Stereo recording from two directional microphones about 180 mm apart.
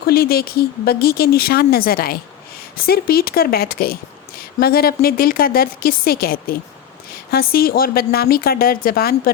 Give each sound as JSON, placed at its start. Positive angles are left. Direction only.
{"t": 0.1, "sound": "speech", "side_deg": 55}